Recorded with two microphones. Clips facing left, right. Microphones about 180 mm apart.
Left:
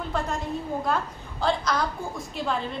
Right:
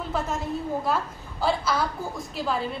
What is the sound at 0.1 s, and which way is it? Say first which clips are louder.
A woman's voice: right 1 dB; 5° right (ahead or behind).